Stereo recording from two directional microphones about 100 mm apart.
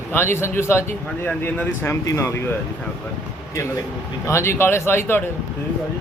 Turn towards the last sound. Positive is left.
turn(degrees=20)  # may be behind; listen again after turning